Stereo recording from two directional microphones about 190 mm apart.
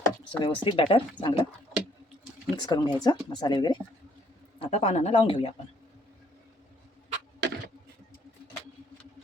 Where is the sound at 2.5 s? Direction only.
20° left (ahead or behind).